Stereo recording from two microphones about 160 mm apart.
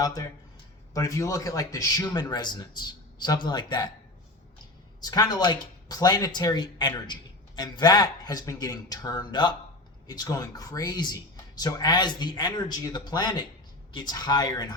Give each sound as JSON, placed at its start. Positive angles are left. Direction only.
{"t": 0.0, "sound": "speech", "side_deg": 25}
{"t": 4.9, "sound": "speech", "side_deg": 25}